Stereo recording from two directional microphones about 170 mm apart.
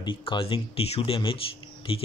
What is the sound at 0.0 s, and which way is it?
Speech, 30° left (ahead or behind).